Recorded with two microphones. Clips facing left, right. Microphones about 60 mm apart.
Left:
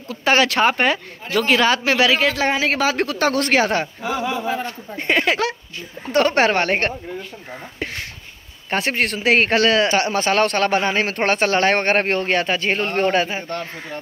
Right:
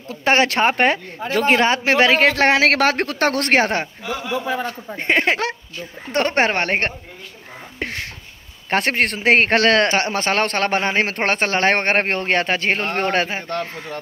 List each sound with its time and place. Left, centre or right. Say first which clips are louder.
0.1 s speech: even; right
2.2 s speech: right 4 dB; right
4.9 s speech: even; right
8.6 s speech: right 2 dB; right
9.6 s a man's voice: right 1 dB; right
9.9 s speech: left 1 dB; right
13.5 s a man's voice: right 2 dB; right